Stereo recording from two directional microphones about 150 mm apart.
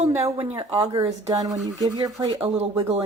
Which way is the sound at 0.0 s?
40° right (ahead or behind).